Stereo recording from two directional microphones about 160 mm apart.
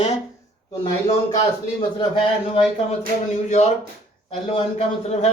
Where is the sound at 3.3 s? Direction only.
45° left (ahead or behind).